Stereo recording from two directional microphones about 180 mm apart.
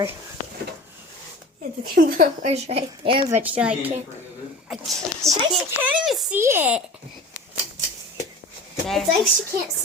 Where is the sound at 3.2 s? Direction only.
10° right (ahead or behind).